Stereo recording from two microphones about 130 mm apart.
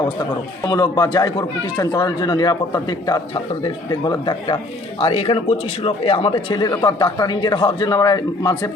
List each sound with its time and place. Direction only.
0.6 s a man's voice: 30° left (ahead or behind)
4.9 s a man's voice: 50° left (ahead or behind); by 8.7 s 30° left (ahead or behind)